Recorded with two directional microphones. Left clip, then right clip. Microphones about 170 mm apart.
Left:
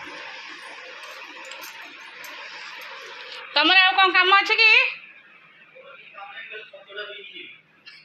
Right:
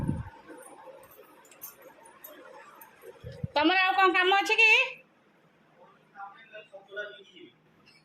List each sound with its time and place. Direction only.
3.5 s a woman's voice: 15° right (ahead or behind)